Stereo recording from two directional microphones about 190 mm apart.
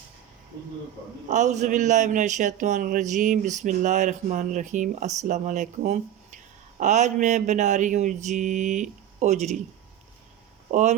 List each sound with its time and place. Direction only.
1.3 s a man's voice: 40° right (ahead or behind)
10.7 s speech: 40° right (ahead or behind)